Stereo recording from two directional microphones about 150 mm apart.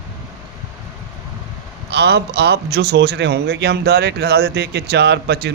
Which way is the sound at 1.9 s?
90° right.